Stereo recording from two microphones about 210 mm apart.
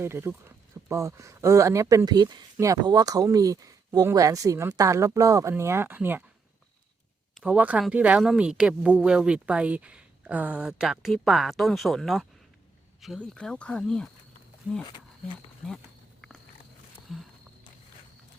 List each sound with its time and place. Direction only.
0.0 s speech: 10° right (ahead or behind)
7.3 s speech: 5° right (ahead or behind)
14.8 s speech: 20° left (ahead or behind)
17.1 s walk: centre (ahead or behind)